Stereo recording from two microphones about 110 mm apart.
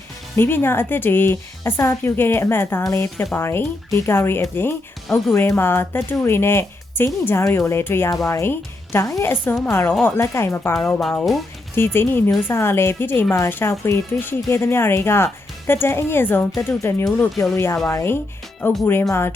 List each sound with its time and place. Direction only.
0.3 s speech: 20° left (ahead or behind)
9.3 s a woman's voice: 15° left (ahead or behind)
10.8 s speech: 5° left (ahead or behind)
11.7 s speech: 20° left (ahead or behind)